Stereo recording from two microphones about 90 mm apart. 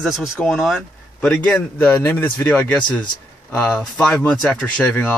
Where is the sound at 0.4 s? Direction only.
5° left (ahead or behind).